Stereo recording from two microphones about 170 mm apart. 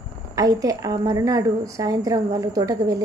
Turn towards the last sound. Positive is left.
turn(degrees=-20)  # may be behind; listen again after turning